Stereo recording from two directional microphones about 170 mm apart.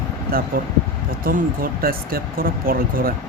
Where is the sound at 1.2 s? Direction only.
55° right (ahead or behind).